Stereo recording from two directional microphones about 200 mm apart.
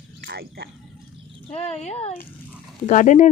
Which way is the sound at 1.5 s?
35° left (ahead or behind).